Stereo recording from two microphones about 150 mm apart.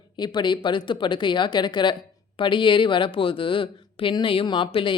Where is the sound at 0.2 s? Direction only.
30° left (ahead or behind).